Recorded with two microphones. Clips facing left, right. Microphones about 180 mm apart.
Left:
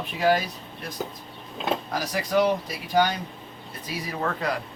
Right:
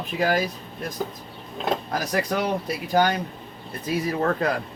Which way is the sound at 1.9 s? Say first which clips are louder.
Right 2 dB; 50° right (ahead or behind).